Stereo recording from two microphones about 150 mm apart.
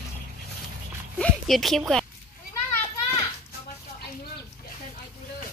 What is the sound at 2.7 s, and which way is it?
Children playing, 20° left (ahead or behind).